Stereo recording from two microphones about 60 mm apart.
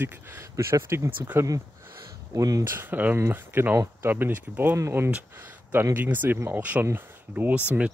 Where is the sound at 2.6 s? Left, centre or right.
Right.